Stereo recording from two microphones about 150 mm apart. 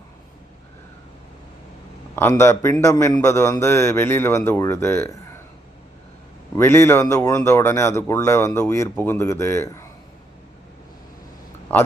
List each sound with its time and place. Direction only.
2.4 s a man's voice: 20° left (ahead or behind)
6.6 s a man's voice: 15° left (ahead or behind)